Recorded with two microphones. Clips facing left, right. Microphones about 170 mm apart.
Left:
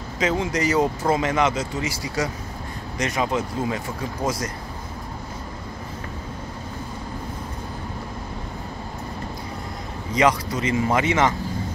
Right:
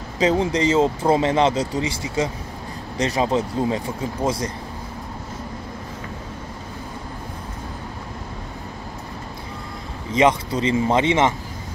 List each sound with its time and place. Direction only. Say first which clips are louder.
0.2 s speech: right 4 dB; 35° right (ahead or behind)
10.1 s speech: right 2 dB; 25° right (ahead or behind)